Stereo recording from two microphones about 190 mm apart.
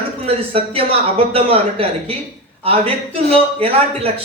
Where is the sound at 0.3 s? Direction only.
30° right (ahead or behind).